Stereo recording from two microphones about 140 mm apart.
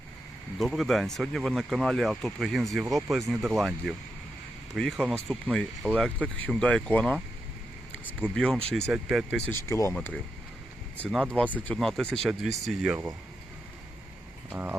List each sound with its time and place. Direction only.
0.6 s speech: centre (ahead or behind)
9.5 s speech: 20° left (ahead or behind)
11.1 s speech: 5° left (ahead or behind)
14.5 s speech: 15° right (ahead or behind)